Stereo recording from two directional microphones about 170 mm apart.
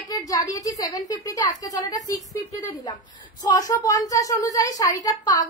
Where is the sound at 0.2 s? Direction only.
20° left (ahead or behind).